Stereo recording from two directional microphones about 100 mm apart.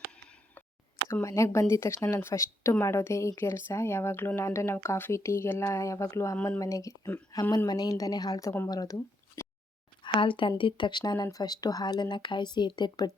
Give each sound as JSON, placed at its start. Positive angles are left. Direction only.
{"t": 1.1, "sound": "speech", "side_deg": 30}
{"t": 10.0, "sound": "speech", "side_deg": 55}